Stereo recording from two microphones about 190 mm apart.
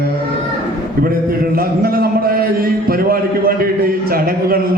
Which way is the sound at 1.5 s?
50° right (ahead or behind).